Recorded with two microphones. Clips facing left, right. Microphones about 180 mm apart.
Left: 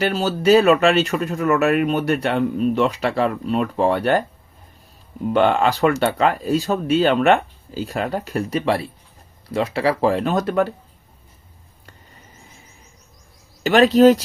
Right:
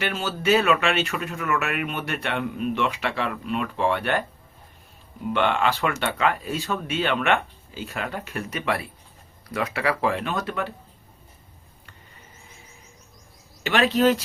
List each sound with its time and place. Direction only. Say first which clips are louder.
0.0 s speech: left 7 dB; 35° left (ahead or behind)
5.3 s speech: left 6 dB; 40° left (ahead or behind)
13.7 s speech: left 8 dB; 40° left (ahead or behind)